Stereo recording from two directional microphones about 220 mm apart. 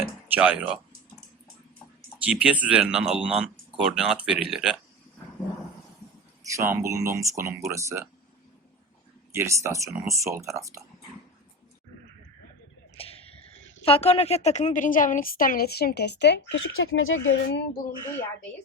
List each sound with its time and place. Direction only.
0.3 s speech: 5° right (ahead or behind)
2.2 s speech: 5° right (ahead or behind)
6.4 s speech: 15° right (ahead or behind)
9.3 s speech: 10° right (ahead or behind)
13.0 s a sound: 25° left (ahead or behind)
13.8 s a woman's voice: 25° left (ahead or behind); by 17.6 s 60° left (ahead or behind)